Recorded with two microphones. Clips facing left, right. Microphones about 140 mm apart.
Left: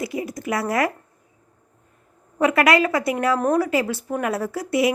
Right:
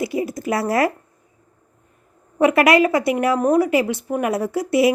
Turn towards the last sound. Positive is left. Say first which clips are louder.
# right 4 dB
turn(degrees=-25)  # may be behind; listen again after turning